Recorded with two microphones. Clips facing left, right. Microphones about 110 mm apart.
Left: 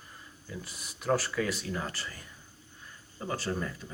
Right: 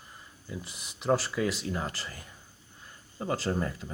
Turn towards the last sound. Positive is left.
turn(degrees=-30)  # may be behind; listen again after turning